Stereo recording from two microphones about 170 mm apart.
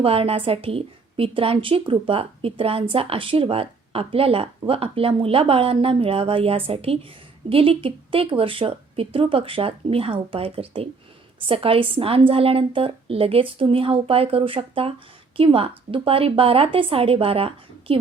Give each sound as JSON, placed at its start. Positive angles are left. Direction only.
{"t": 0.0, "sound": "a woman's voice", "side_deg": -35}